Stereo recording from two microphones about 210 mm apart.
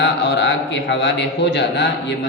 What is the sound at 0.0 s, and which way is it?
A man's voice, 55° left (ahead or behind).